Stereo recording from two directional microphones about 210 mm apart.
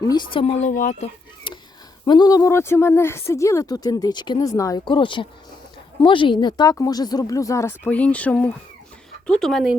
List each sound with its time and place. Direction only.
0.1 s speech: 20° left (ahead or behind)
2.0 s speech: 20° left (ahead or behind); by 9.7 s centre (ahead or behind)